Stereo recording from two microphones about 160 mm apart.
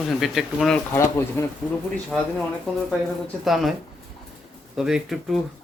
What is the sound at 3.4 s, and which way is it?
Speech, centre (ahead or behind).